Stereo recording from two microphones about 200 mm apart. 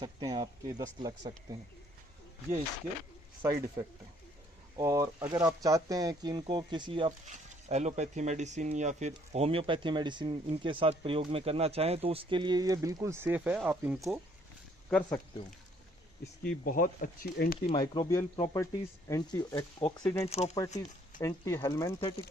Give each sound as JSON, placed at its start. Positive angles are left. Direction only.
{"t": 0.0, "sound": "speech", "side_deg": -20}
{"t": 3.4, "sound": "speech", "side_deg": -15}
{"t": 4.8, "sound": "speech", "side_deg": -15}
{"t": 7.3, "sound": "speech", "side_deg": -35}
{"t": 14.8, "sound": "speech", "side_deg": 5}
{"t": 16.4, "sound": "speech", "side_deg": 45}
{"t": 17.7, "sound": "speech", "side_deg": 25}
{"t": 20.3, "sound": "speech", "side_deg": 35}
{"t": 21.2, "sound": "speech", "side_deg": 15}